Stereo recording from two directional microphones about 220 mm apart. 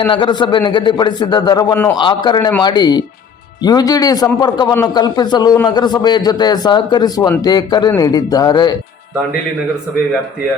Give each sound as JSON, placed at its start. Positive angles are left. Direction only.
{"t": 0.1, "sound": "a man's voice", "side_deg": 20}